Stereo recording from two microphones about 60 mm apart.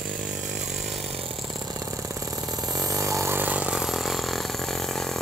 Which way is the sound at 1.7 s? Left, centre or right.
Right.